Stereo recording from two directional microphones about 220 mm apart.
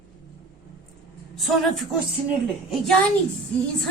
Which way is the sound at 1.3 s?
Centre (ahead or behind).